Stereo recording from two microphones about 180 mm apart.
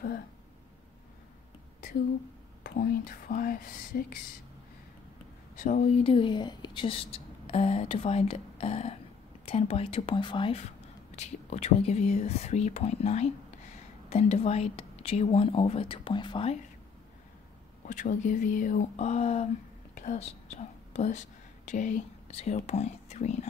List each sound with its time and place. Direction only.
2.6 s speech: 55° left (ahead or behind)
5.6 s speech: 45° left (ahead or behind)
6.0 s a woman's voice: 30° left (ahead or behind)
17.8 s a woman's voice: 45° left (ahead or behind)